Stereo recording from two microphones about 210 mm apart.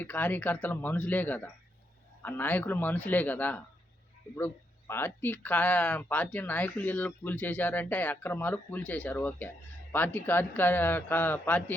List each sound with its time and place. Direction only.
0.0 s speech: 10° left (ahead or behind)